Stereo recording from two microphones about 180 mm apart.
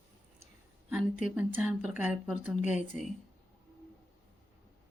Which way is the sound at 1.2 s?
5° right (ahead or behind).